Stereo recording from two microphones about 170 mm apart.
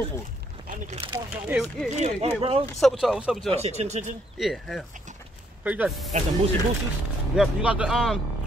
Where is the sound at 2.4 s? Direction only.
35° right (ahead or behind).